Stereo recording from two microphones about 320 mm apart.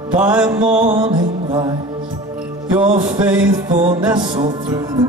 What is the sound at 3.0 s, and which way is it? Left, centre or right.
Music, centre.